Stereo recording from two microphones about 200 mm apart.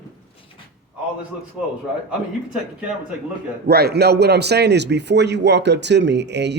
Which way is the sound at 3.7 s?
55° right (ahead or behind).